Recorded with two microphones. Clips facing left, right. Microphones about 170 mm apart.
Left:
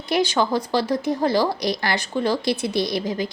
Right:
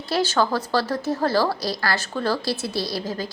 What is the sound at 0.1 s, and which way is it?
A woman's voice, 15° left (ahead or behind).